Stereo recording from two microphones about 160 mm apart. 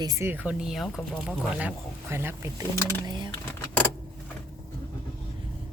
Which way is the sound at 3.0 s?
30° right (ahead or behind).